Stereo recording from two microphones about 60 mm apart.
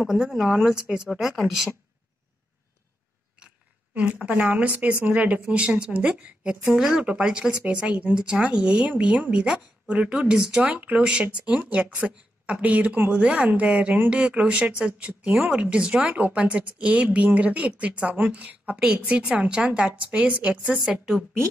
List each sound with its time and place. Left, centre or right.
0.0 s speech: centre
4.2 s speech: centre
20.8 s speech: centre